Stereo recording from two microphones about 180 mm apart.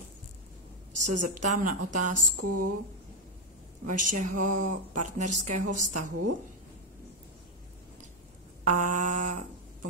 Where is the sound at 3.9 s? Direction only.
45° right (ahead or behind).